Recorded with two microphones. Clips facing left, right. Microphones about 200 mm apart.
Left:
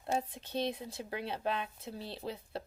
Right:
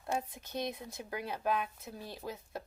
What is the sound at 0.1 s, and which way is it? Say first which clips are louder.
Speech: left 2 dB; 30° left (ahead or behind).